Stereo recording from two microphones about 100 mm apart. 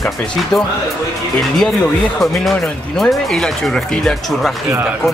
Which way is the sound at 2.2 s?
Centre (ahead or behind).